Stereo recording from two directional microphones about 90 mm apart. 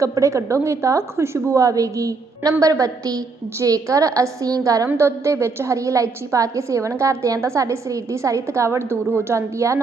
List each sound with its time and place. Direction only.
0.0 s a woman's voice: 35° right (ahead or behind)